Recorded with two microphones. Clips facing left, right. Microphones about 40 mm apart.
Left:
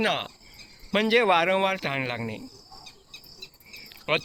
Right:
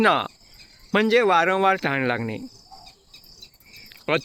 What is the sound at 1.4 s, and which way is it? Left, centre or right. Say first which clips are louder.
Speech: right 4 dB; centre.